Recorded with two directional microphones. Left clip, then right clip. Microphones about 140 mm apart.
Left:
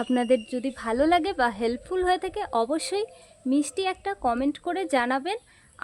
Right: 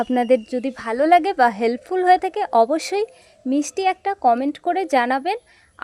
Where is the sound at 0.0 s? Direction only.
15° right (ahead or behind).